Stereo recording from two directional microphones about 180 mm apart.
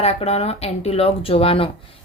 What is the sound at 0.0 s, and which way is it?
Speech, 35° left (ahead or behind).